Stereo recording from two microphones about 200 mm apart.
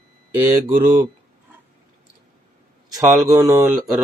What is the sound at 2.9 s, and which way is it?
Speech, 20° right (ahead or behind).